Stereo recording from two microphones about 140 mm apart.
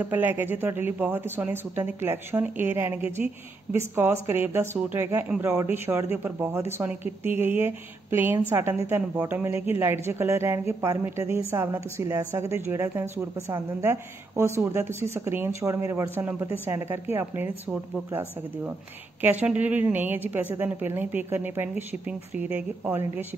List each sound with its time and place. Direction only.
0.0 s speech: 15° right (ahead or behind)